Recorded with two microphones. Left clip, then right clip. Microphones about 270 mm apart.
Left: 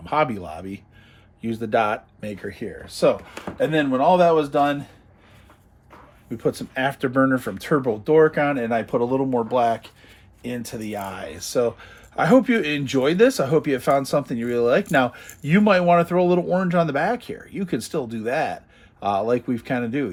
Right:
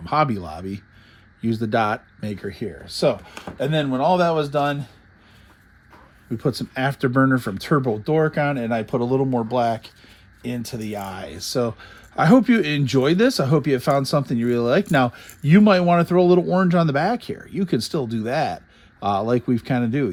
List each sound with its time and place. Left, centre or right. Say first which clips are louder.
0.0 s speech: right 1 dB; right
6.3 s speech: left 1 dB; right